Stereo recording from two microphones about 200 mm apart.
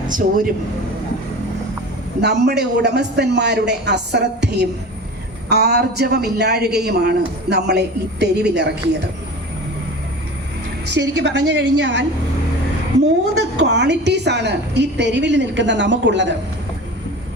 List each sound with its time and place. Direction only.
0.1 s speech: 40° right (ahead or behind)
2.2 s a woman's voice: 55° right (ahead or behind)
11.2 s a woman's voice: 60° right (ahead or behind)
13.6 s a woman's voice: 60° right (ahead or behind)